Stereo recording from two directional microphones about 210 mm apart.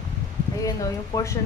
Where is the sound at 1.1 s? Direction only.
15° left (ahead or behind).